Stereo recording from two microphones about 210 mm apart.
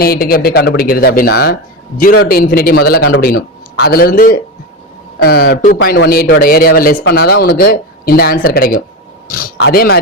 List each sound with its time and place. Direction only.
0.0 s speech: 45° left (ahead or behind)